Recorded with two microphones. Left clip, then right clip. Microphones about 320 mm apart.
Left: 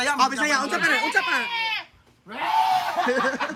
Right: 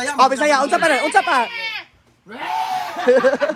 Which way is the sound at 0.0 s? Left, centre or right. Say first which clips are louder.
Right 6 dB; centre.